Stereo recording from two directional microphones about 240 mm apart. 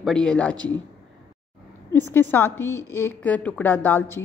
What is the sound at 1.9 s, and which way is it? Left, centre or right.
A woman's voice, centre.